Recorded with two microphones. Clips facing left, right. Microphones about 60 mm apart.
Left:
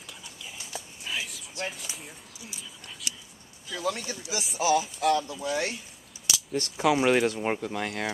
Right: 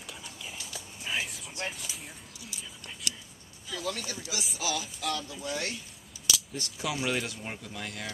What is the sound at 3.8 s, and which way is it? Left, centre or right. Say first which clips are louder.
Speech: left 5 dB; left.